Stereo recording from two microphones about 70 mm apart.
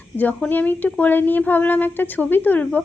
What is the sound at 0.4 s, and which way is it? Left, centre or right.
A woman's voice, left.